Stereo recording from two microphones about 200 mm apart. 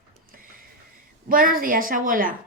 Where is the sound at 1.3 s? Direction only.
45° right (ahead or behind).